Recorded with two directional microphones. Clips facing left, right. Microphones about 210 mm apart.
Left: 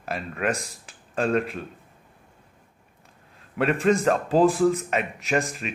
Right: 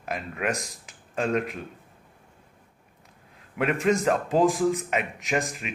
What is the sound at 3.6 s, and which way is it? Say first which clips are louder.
Speech: left 2 dB; 15° right (ahead or behind).